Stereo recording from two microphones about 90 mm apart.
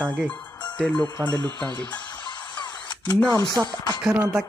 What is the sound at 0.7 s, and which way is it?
Speech, 10° left (ahead or behind).